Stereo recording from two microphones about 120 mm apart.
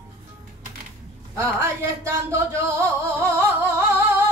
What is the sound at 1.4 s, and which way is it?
Music, 25° right (ahead or behind).